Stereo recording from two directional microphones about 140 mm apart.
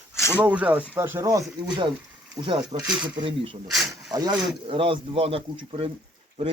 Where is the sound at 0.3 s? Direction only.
10° right (ahead or behind).